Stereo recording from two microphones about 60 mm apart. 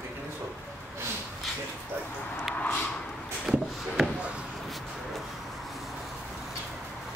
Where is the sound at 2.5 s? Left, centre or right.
Left.